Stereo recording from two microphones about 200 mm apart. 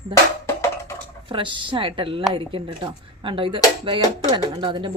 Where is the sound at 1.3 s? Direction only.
25° right (ahead or behind).